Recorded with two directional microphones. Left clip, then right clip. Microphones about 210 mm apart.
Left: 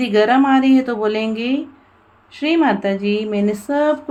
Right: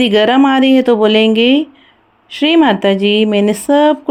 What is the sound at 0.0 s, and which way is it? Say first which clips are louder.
Speech: right 4 dB; 40° right (ahead or behind).